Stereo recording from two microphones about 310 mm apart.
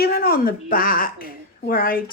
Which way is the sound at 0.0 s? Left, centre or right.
Left.